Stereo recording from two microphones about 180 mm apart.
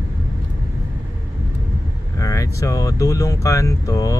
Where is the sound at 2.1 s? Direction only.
15° left (ahead or behind).